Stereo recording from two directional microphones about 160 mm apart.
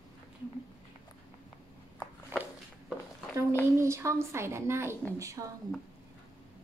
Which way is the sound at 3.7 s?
15° right (ahead or behind).